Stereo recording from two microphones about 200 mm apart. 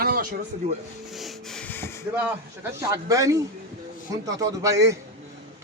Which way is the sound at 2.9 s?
15° right (ahead or behind).